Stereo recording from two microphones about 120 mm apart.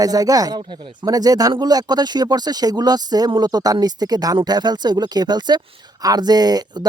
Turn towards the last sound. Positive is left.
turn(degrees=-35)  # may be behind; listen again after turning